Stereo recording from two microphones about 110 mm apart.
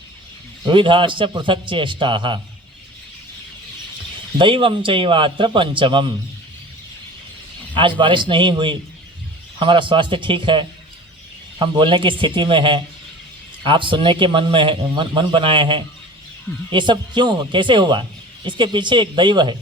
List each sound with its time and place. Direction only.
0.6 s a man's voice: 50° right (ahead or behind)
4.4 s a man's voice: 50° right (ahead or behind)
7.7 s a man's voice: 45° right (ahead or behind)